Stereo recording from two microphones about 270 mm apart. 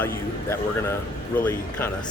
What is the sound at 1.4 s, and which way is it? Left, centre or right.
Speech, centre.